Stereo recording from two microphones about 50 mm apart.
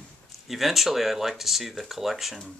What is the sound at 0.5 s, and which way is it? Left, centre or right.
Speech, centre.